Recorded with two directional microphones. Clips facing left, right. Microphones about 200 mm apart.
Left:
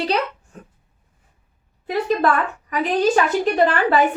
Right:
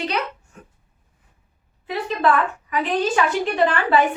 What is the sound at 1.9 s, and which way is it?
A woman's voice, 40° left (ahead or behind).